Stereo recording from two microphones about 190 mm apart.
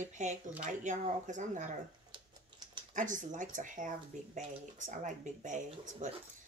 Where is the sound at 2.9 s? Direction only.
45° right (ahead or behind).